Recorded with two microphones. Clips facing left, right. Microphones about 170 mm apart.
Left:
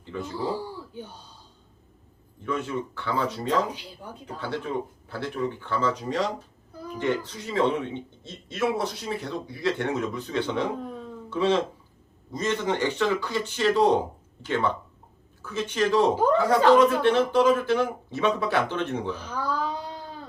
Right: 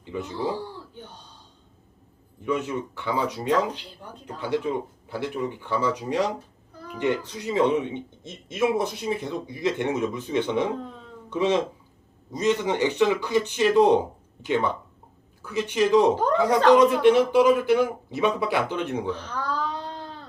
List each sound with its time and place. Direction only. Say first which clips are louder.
0.0 s speech: right 2 dB; 15° right (ahead or behind)
2.4 s speech: right 2 dB; 15° right (ahead or behind)
3.7 s speech: right 1 dB; 10° left (ahead or behind)
4.4 s speech: right 4 dB; 15° right (ahead or behind)
10.8 s dog: left 1 dB; 10° left (ahead or behind)
11.3 s speech: right 1 dB; 15° right (ahead or behind)
19.1 s cat: even; 10° left (ahead or behind)